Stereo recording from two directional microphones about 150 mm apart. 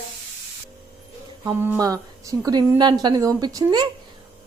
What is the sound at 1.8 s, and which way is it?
A woman's voice, 20° right (ahead or behind).